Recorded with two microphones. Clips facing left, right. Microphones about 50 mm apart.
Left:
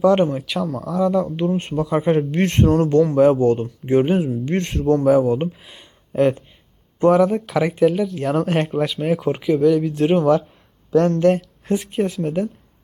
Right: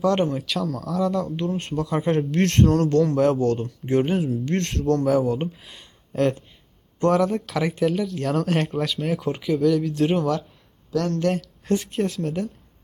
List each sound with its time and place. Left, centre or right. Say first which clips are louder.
0.0 s speech: left 5 dB; centre
7.3 s speech: left 5 dB; centre
11.3 s speech: left 2 dB; centre